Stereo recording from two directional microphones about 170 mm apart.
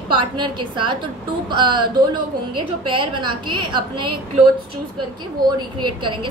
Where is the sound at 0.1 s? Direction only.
30° right (ahead or behind).